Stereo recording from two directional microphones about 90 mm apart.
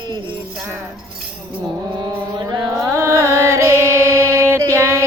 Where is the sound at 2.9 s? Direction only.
35° right (ahead or behind).